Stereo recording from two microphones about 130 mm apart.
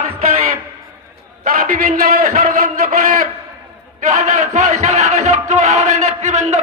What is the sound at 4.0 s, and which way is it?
Music, 75° right (ahead or behind).